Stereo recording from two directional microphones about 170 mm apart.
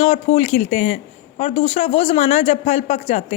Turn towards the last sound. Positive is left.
turn(degrees=40)  # may be behind; listen again after turning